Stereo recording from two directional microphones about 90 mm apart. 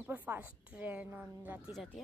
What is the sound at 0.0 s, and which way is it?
A woman's voice, 20° right (ahead or behind).